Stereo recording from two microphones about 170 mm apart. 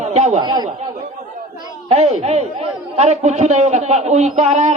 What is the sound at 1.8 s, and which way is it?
A man's voice, 40° right (ahead or behind).